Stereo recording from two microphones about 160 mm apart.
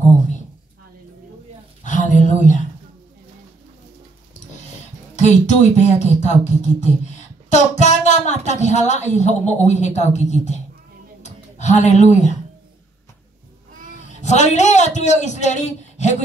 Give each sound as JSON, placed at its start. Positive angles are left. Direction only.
{"t": 1.8, "sound": "a sound", "side_deg": 50}
{"t": 5.1, "sound": "a man's voice", "side_deg": 45}
{"t": 14.2, "sound": "a man's voice", "side_deg": 45}